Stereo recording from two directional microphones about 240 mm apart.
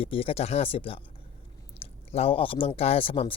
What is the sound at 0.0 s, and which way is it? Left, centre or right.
Speech, left.